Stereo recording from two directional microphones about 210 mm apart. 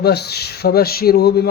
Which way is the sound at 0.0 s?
50° left (ahead or behind).